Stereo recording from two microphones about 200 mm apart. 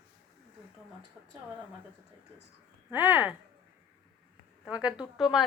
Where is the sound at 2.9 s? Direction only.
10° right (ahead or behind).